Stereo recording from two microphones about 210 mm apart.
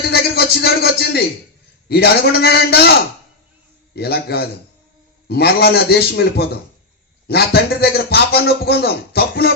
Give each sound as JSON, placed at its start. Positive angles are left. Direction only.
{"t": 0.1, "sound": "a sound", "side_deg": 50}
{"t": 1.9, "sound": "a man's voice", "side_deg": 50}
{"t": 3.9, "sound": "a man's voice", "side_deg": 50}